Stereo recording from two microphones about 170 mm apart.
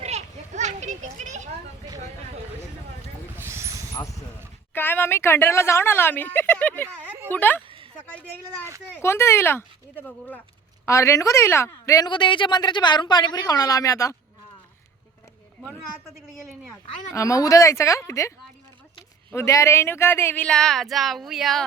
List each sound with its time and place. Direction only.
0.0 s children playing: 40° right (ahead or behind)
3.3 s snake: 15° right (ahead or behind)
4.7 s a woman's voice: 10° left (ahead or behind)
6.8 s a sound: 10° right (ahead or behind)
7.3 s speech: 10° left (ahead or behind)
9.0 s a woman's voice: 15° left (ahead or behind)
17.2 s speech: 20° left (ahead or behind); by 21.6 s centre (ahead or behind)